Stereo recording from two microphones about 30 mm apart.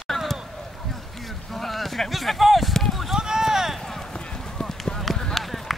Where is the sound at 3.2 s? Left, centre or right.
Centre.